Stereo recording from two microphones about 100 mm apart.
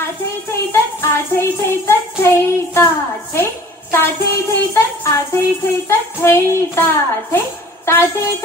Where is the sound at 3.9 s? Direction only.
25° left (ahead or behind).